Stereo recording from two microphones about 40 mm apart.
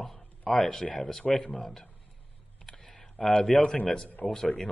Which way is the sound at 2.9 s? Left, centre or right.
Centre.